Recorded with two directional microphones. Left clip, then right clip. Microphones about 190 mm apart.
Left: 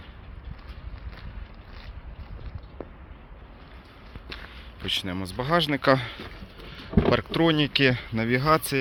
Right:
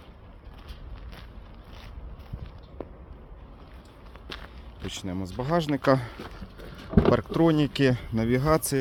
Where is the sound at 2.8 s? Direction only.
Centre (ahead or behind).